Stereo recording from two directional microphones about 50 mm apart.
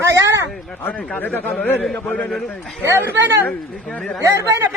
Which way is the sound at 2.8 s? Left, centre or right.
Right.